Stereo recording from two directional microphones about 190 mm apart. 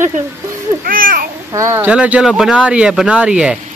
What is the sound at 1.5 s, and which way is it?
Speech, 15° right (ahead or behind).